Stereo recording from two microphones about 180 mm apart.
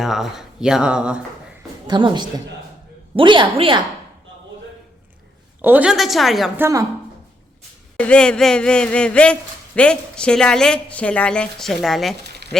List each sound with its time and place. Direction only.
0.0 s speech: centre (ahead or behind)
1.9 s a woman's voice: 25° right (ahead or behind)
5.6 s speech: 10° right (ahead or behind)
6.6 s a woman's voice: 15° right (ahead or behind)
7.9 s speech: 5° left (ahead or behind)
12.4 s sheep: 65° right (ahead or behind)